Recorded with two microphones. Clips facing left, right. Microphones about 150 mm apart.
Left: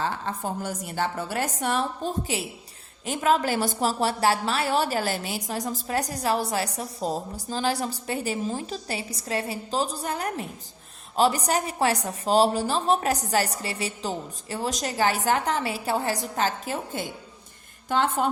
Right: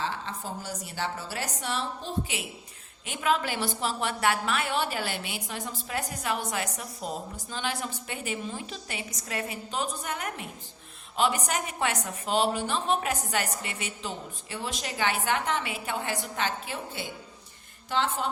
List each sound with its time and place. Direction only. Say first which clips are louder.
0.0 s a woman's voice: left 5 dB; 50° left (ahead or behind)